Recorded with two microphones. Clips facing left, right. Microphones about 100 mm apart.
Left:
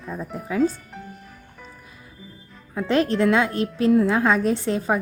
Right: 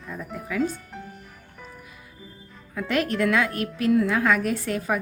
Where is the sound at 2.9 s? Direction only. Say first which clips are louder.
Left 4 dB; 30° left (ahead or behind).